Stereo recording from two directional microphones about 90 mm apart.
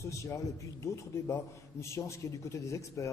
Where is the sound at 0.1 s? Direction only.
35° left (ahead or behind).